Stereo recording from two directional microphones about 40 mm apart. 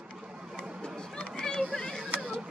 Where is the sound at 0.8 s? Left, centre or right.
Left.